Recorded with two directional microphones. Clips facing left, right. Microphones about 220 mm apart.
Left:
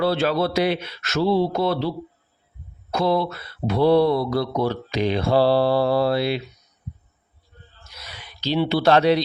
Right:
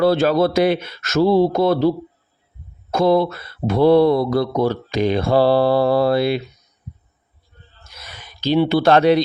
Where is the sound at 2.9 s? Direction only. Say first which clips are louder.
Right 5 dB; 45° right (ahead or behind).